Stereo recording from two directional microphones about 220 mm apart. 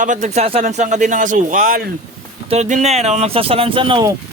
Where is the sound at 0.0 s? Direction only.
35° right (ahead or behind).